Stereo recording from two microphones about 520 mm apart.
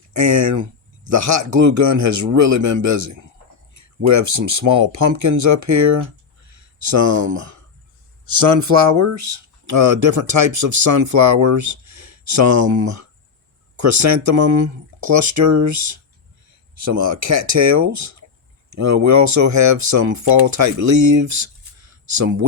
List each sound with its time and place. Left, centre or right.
0.1 s speech: right